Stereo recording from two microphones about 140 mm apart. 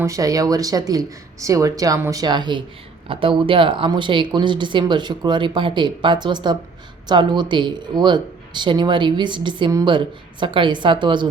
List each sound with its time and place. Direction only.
0.0 s speech: 25° right (ahead or behind)